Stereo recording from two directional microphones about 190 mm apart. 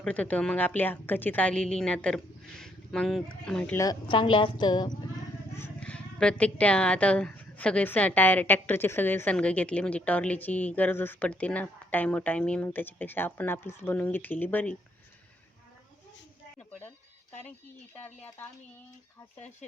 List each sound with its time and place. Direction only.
0.0 s speech: 5° left (ahead or behind)
3.8 s a woman's voice: 25° left (ahead or behind)
5.5 s speech: 10° left (ahead or behind)
18.0 s speech: 10° left (ahead or behind)